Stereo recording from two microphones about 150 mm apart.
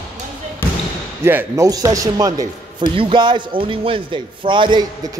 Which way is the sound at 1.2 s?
20° right (ahead or behind).